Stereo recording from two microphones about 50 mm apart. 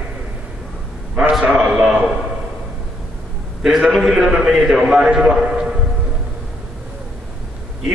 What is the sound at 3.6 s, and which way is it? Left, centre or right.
A man's voice, centre.